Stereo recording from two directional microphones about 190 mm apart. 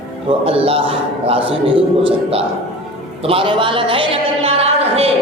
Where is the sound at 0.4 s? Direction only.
30° right (ahead or behind).